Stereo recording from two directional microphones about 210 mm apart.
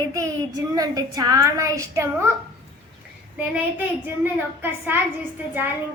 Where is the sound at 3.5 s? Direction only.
10° right (ahead or behind).